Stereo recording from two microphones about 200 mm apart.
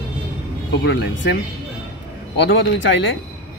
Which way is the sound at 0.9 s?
65° left (ahead or behind).